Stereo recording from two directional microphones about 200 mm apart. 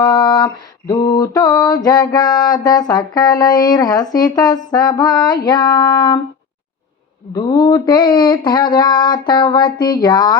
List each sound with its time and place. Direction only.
0.0 s mantra: 20° left (ahead or behind)
7.3 s mantra: 20° left (ahead or behind)